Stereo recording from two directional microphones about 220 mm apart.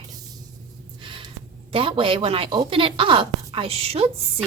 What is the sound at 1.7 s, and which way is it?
A woman's voice, 25° right (ahead or behind).